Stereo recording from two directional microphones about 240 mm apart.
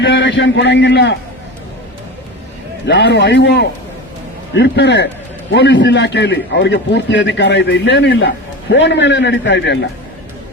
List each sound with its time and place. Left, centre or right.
0.0 s a man's voice: left
2.8 s a man's voice: left